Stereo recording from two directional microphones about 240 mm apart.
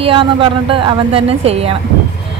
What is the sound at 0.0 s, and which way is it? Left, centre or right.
A woman's voice, right.